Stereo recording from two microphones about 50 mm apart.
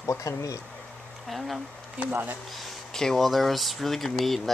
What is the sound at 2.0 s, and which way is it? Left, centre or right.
Speech, right.